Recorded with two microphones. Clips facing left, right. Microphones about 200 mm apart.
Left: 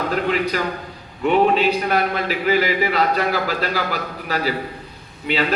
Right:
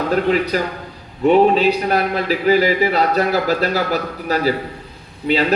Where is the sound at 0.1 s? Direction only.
40° right (ahead or behind).